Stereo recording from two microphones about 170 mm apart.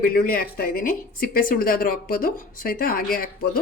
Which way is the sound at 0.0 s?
60° left (ahead or behind).